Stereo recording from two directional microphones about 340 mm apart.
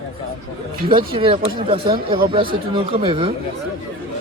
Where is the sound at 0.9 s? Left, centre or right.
Centre.